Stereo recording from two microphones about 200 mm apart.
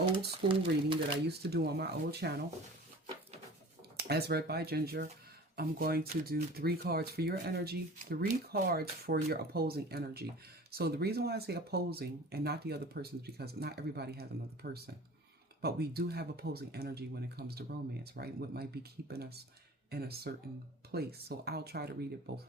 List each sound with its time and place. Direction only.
0.4 s speech: 25° right (ahead or behind)
1.3 s speech: 55° right (ahead or behind)
3.9 s speech: 50° right (ahead or behind)